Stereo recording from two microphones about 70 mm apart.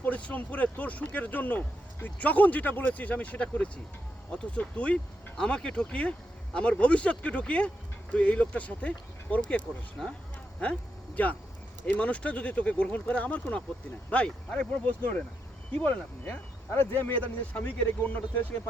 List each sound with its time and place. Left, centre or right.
0.0 s speech: left
10.0 s speech: centre
10.6 s speech: centre